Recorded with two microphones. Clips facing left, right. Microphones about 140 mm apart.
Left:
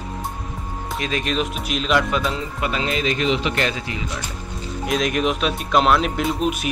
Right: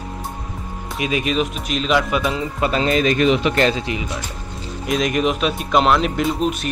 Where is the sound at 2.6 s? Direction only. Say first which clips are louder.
Right 6 dB; 40° right (ahead or behind).